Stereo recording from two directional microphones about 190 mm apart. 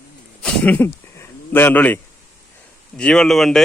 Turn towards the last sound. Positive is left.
turn(degrees=0)  # may be behind; listen again after turning